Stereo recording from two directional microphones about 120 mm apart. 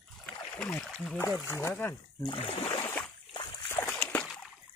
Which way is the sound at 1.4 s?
20° left (ahead or behind).